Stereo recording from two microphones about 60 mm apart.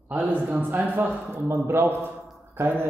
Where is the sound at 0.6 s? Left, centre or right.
Right.